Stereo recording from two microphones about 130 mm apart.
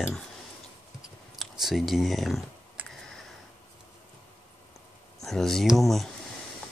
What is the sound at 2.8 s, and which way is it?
Tick, 10° right (ahead or behind).